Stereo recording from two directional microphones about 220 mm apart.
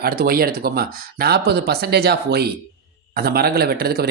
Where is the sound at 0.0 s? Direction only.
45° right (ahead or behind).